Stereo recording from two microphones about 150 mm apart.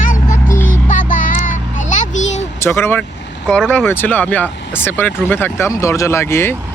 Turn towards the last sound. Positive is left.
turn(degrees=15)  # may be behind; listen again after turning